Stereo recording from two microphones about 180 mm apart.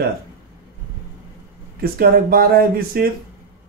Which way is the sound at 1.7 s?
55° right (ahead or behind).